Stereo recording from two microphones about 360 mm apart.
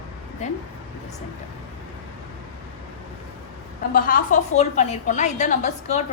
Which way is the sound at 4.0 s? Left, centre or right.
Left.